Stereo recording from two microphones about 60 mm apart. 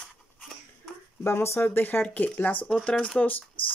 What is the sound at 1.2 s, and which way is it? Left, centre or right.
Speech, left.